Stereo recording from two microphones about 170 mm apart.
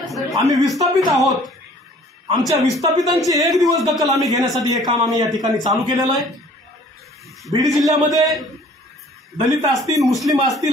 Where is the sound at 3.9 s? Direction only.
Centre (ahead or behind).